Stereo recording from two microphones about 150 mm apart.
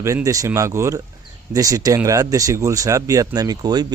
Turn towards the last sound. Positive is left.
turn(degrees=-25)  # may be behind; listen again after turning